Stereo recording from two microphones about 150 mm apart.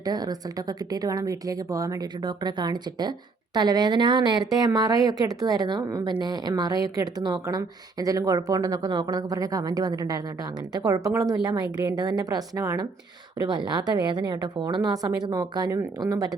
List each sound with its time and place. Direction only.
0.0 s speech: 25° right (ahead or behind)